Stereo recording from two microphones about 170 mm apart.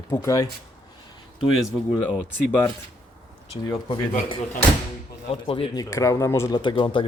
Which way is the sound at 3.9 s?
30° left (ahead or behind).